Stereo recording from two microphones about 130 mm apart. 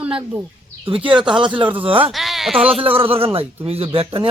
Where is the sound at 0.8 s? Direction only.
45° right (ahead or behind).